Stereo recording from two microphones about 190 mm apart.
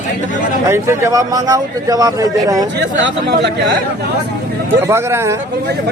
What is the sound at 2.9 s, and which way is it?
Speech, 65° right (ahead or behind).